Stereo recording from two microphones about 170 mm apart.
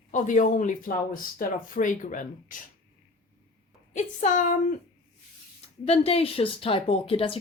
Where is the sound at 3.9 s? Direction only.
45° left (ahead or behind).